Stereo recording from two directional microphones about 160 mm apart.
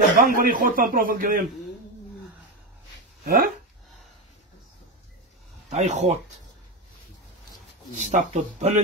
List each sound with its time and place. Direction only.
0.2 s speech: 60° right (ahead or behind)
3.3 s speech: 65° right (ahead or behind)
5.7 s speech: 45° right (ahead or behind)
8.0 s speech: 45° right (ahead or behind)